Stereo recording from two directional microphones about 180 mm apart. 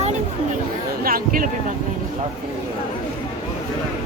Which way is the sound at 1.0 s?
55° right (ahead or behind).